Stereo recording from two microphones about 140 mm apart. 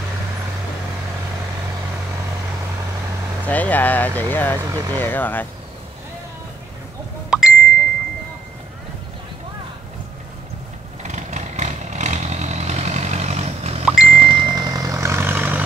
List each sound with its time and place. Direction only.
3.4 s speech: 10° left (ahead or behind)
7.2 s ding: 5° right (ahead or behind)
11.0 s vehicle: 55° right (ahead or behind)
14.0 s vehicle: 40° right (ahead or behind); by 15.6 s 15° right (ahead or behind)